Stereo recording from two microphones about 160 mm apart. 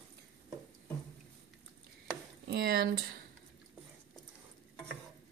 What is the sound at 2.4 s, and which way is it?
Speech, 80° right.